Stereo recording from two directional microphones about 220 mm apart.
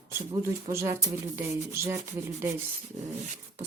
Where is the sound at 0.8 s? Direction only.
10° right (ahead or behind).